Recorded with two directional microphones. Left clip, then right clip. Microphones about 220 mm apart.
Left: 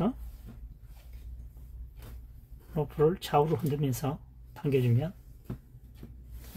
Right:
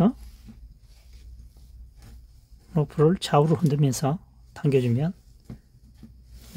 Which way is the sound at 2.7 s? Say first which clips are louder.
Right 5 dB; 50° right (ahead or behind).